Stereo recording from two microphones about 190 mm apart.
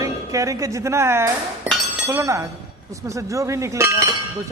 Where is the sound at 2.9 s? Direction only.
15° right (ahead or behind).